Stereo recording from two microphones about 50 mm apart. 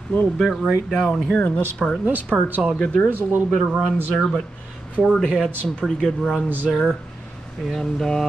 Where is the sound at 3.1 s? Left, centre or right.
Right.